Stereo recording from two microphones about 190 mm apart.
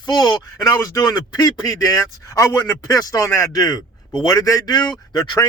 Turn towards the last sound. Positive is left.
turn(degrees=20)  # may be behind; listen again after turning